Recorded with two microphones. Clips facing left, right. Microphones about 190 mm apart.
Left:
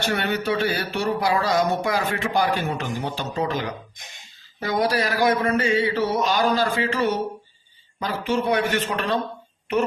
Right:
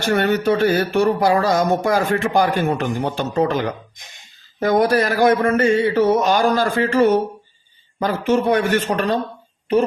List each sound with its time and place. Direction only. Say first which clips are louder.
0.0 s speech: right 7 dB; 50° right (ahead or behind)